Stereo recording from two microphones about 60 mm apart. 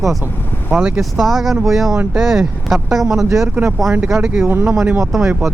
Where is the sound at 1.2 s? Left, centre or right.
Centre.